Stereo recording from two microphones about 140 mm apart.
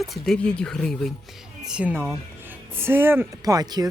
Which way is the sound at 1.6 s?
10° right (ahead or behind).